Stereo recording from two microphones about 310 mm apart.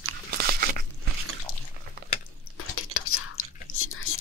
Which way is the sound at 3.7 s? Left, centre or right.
Left.